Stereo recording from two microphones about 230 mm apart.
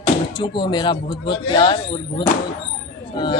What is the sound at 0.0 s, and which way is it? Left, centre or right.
Speech, left.